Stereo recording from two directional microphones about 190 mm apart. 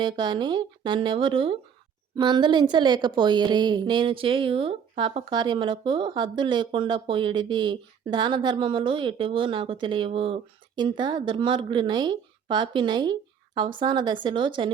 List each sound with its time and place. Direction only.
0.0 s a woman's voice: 25° right (ahead or behind)